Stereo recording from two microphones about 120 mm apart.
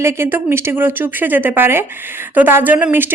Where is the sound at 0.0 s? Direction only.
20° right (ahead or behind).